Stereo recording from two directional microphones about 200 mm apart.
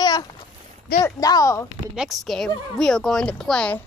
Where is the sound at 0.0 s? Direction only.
20° left (ahead or behind).